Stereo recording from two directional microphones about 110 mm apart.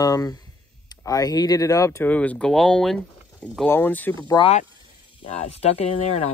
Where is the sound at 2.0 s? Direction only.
15° left (ahead or behind).